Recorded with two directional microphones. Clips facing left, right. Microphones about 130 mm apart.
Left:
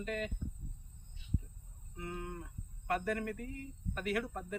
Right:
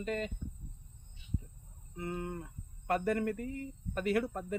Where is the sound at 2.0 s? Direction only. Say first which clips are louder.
Right 4 dB; 35° right (ahead or behind).